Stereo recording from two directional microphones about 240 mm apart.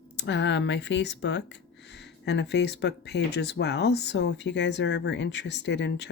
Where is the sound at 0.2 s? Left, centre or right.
Left.